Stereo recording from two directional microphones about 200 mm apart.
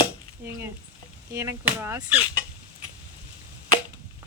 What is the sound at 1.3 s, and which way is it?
Speech, 15° right (ahead or behind).